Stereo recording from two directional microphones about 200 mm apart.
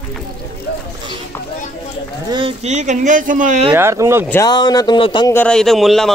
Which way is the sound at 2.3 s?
30° right (ahead or behind).